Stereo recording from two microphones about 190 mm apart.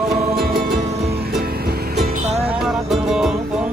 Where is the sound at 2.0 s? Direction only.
35° right (ahead or behind).